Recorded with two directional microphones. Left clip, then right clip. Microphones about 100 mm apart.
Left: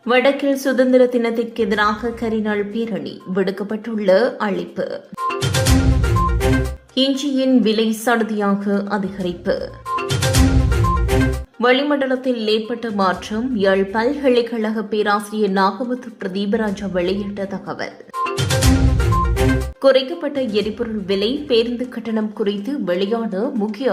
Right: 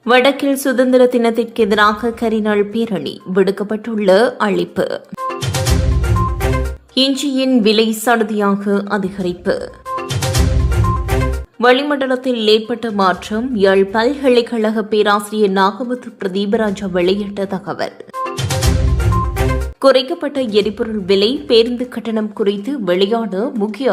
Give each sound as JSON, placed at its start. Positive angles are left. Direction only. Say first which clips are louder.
{"t": 0.0, "sound": "a woman's voice", "louder": "right 4 dB", "side_deg": -30}
{"t": 6.1, "sound": "music", "louder": "right 2 dB", "side_deg": 0}
{"t": 6.9, "sound": "a woman's voice", "louder": "right 3 dB", "side_deg": -35}
{"t": 11.6, "sound": "a woman's voice", "louder": "right 3 dB", "side_deg": -25}
{"t": 19.8, "sound": "a woman's voice", "louder": "right 3 dB", "side_deg": -35}